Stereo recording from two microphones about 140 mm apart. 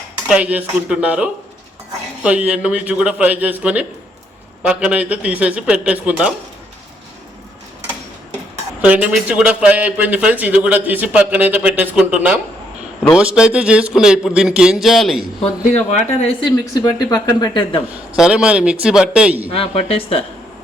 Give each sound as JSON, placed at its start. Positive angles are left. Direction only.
{"t": 0.3, "sound": "a man's voice", "side_deg": -10}
{"t": 8.8, "sound": "a man's voice", "side_deg": -10}
{"t": 16.4, "sound": "speech", "side_deg": 30}
{"t": 18.2, "sound": "a man's voice", "side_deg": -5}
{"t": 19.5, "sound": "speech", "side_deg": 45}